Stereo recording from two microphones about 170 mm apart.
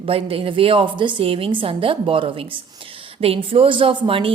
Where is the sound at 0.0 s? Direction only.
35° right (ahead or behind).